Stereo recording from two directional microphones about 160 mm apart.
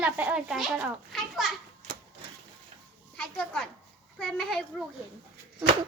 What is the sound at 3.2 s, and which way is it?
A child's voice, 5° left (ahead or behind).